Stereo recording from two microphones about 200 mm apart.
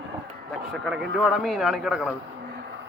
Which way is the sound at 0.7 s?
Centre (ahead or behind).